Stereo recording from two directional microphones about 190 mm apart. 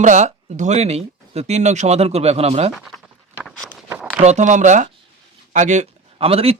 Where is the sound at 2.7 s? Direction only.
Centre (ahead or behind).